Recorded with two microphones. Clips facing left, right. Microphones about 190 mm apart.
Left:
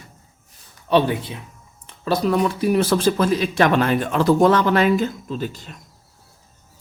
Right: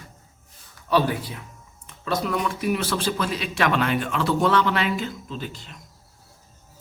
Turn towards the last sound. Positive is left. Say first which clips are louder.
# left 6 dB
turn(degrees=45)  # may be behind; listen again after turning